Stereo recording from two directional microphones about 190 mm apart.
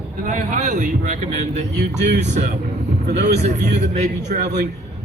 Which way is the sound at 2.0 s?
65° right (ahead or behind).